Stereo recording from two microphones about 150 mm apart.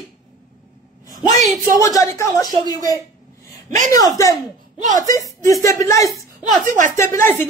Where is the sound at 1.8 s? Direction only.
20° left (ahead or behind).